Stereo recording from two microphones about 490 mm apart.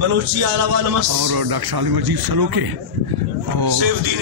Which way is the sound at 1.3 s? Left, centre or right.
Right.